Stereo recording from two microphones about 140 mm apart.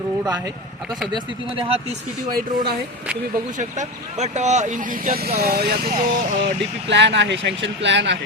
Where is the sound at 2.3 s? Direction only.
90° right.